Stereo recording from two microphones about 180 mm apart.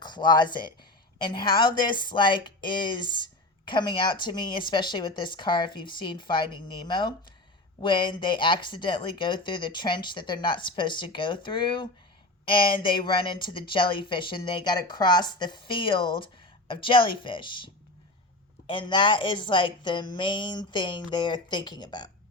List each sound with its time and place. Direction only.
0.0 s a woman's voice: 25° left (ahead or behind)
18.7 s a woman's voice: 25° left (ahead or behind)